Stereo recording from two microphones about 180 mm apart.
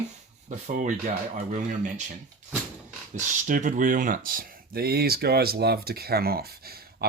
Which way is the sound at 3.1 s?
45° right (ahead or behind).